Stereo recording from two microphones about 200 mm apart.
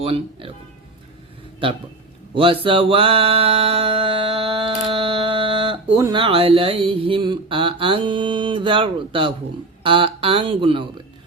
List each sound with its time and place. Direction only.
0.0 s speech: 25° right (ahead or behind)
2.3 s speech: 25° right (ahead or behind)
2.6 s mantra: 25° right (ahead or behind)
9.8 s speech: 25° right (ahead or behind)